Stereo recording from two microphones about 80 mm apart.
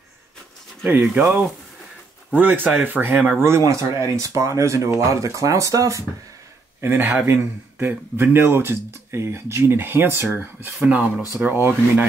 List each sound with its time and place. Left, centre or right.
0.8 s speech: centre
2.3 s speech: right
6.8 s speech: right